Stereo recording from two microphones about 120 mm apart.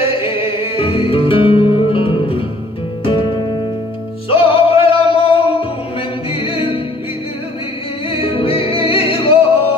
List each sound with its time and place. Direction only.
0.0 s music: 50° left (ahead or behind)
4.3 s music: 50° left (ahead or behind)
8.1 s music: 50° left (ahead or behind)